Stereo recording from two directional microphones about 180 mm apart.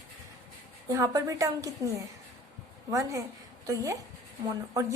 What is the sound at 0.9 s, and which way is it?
A woman's voice, 20° right (ahead or behind).